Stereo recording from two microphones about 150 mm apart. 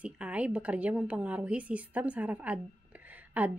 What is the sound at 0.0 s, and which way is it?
A woman's voice, 10° right (ahead or behind).